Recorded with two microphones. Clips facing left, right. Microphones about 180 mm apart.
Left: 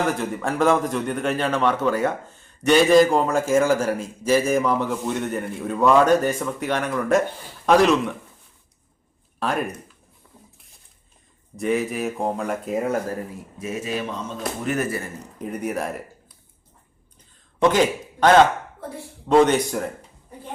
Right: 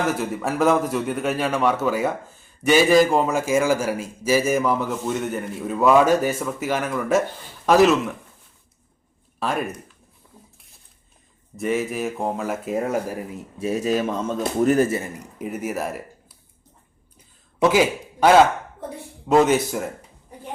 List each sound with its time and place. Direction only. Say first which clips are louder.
0.1 s speech: right 1 dB; 5° right (ahead or behind)
9.4 s speech: even; centre (ahead or behind)
11.5 s speech: left 1 dB; centre (ahead or behind)
13.6 s speech: right 6 dB; 35° right (ahead or behind)
14.8 s speech: right 5 dB; 20° right (ahead or behind); by 16.4 s centre (ahead or behind)
17.2 s a sound: right 1 dB; 5° right (ahead or behind)
19.3 s speech: even; 5° right (ahead or behind)